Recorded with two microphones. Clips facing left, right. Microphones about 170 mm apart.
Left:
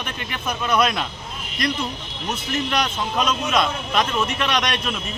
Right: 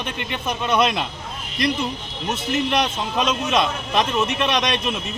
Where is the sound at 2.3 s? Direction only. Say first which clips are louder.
Right 3 dB; 25° right (ahead or behind).